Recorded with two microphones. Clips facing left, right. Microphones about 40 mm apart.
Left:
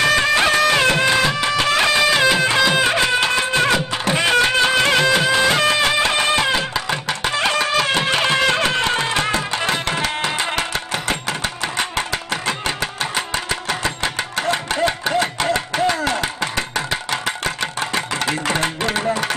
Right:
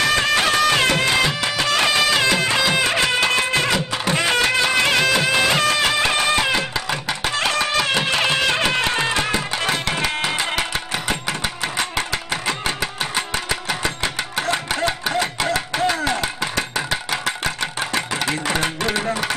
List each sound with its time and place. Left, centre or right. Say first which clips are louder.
0.2 s music: left 2 dB; centre
5.3 s music: left 2 dB; centre
5.6 s music: left 2 dB; centre
7.2 s a sound: left 2 dB; centre
8.2 s music: left 2 dB; centre
9.6 s tabla: left 1 dB; centre
10.5 s music: left 1 dB; centre
11.7 s music: left 2 dB; centre
12.3 s music: left 1 dB; centre
14.8 s a sound: left 3 dB; centre